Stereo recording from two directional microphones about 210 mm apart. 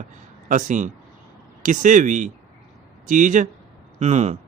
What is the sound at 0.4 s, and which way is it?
Speech, 35° right (ahead or behind).